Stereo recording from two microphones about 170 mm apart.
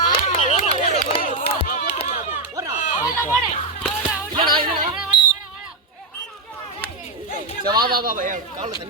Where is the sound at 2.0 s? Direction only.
40° left (ahead or behind).